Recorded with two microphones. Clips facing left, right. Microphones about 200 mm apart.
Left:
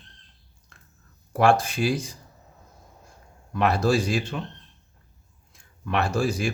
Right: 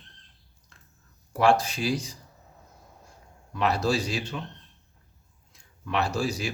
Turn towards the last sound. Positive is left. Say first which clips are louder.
# left 3 dB
turn(degrees=50)  # may be behind; listen again after turning